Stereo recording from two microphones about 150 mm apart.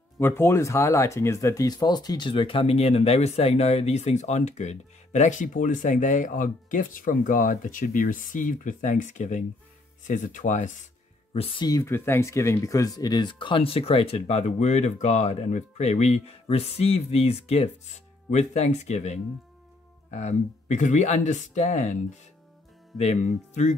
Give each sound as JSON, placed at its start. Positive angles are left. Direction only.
{"t": 0.2, "sound": "speech", "side_deg": 15}
{"t": 11.3, "sound": "speech", "side_deg": 35}
{"t": 22.9, "sound": "speech", "side_deg": 45}